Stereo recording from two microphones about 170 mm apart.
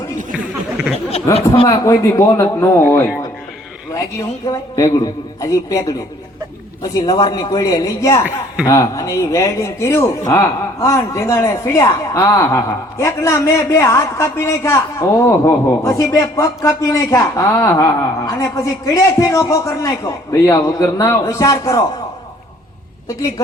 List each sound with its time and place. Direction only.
1.1 s speech: 40° left (ahead or behind)
1.6 s speech: 20° left (ahead or behind)
4.4 s a man's voice: 20° left (ahead or behind)
7.0 s a man's voice: 25° left (ahead or behind)